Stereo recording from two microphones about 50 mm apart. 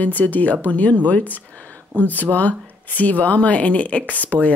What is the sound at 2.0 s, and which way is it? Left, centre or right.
Speech, left.